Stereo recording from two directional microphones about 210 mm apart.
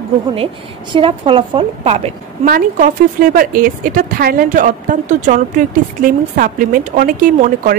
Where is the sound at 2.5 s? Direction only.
40° right (ahead or behind).